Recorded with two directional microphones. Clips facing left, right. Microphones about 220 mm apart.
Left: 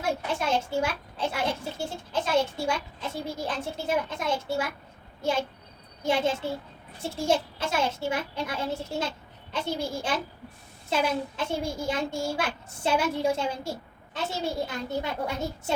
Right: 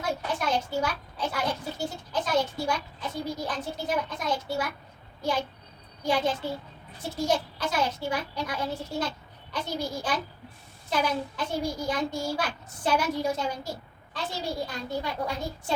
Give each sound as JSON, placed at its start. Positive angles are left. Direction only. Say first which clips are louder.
{"t": 0.3, "sound": "a child's voice", "louder": "left 1 dB", "side_deg": 25}